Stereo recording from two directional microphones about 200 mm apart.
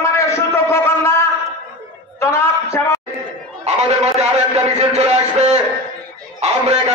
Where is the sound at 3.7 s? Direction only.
35° right (ahead or behind).